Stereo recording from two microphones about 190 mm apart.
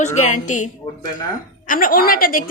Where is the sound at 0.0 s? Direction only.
40° left (ahead or behind).